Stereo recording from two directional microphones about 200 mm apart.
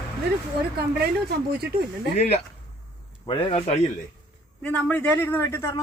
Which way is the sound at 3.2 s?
25° left (ahead or behind).